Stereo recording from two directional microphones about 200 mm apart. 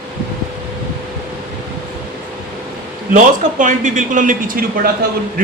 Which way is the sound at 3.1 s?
40° right (ahead or behind).